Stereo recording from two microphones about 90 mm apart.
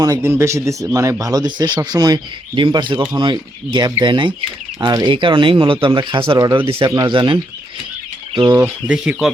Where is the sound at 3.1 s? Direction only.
50° right (ahead or behind); by 4.9 s 65° right (ahead or behind).